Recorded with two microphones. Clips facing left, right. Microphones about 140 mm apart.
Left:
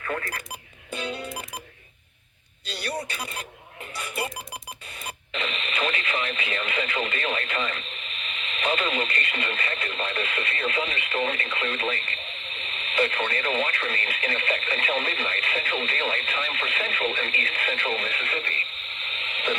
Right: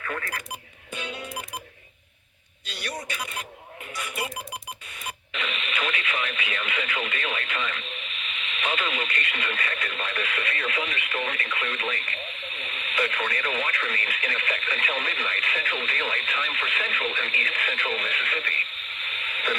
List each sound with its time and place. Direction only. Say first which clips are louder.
0.0 s alarm clock: left 2 dB; 35° left (ahead or behind)
0.9 s music: left 3 dB; 35° left (ahead or behind)
2.6 s radio: left 3 dB; 30° left (ahead or behind)
3.9 s alarm clock: left 1 dB; 30° left (ahead or behind)
5.0 s speech: left 1 dB; 35° left (ahead or behind)